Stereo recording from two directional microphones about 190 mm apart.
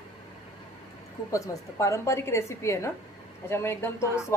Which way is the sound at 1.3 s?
15° left (ahead or behind).